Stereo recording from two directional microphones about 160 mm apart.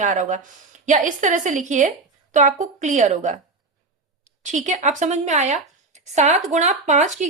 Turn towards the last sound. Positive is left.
turn(degrees=-50)  # may be behind; listen again after turning